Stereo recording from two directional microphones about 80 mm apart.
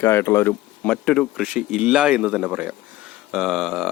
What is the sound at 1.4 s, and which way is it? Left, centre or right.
Speech, centre.